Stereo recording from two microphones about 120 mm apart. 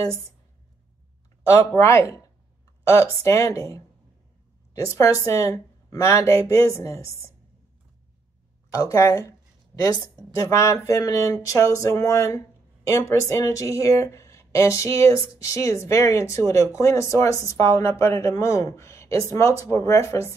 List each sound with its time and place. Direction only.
1.4 s speech: 20° left (ahead or behind)
8.7 s speech: 25° left (ahead or behind)